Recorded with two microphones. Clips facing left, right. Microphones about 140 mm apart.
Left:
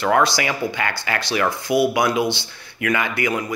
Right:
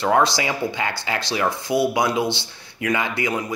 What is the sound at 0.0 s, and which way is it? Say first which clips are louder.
Speech: left 1 dB; 25° right (ahead or behind).